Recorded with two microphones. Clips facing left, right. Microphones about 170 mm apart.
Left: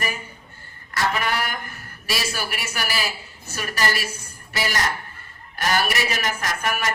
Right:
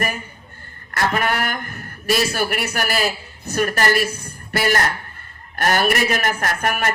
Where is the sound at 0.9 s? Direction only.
55° right (ahead or behind).